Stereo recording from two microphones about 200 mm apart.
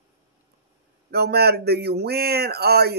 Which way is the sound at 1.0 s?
50° right (ahead or behind).